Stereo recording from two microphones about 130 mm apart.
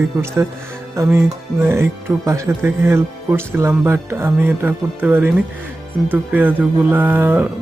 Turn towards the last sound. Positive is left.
turn(degrees=-15)  # may be behind; listen again after turning